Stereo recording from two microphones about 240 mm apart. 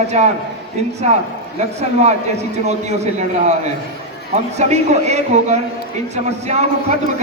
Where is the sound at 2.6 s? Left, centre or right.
Right.